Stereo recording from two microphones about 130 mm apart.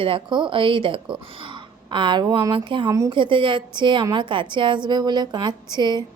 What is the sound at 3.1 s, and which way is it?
Speech, 40° right (ahead or behind).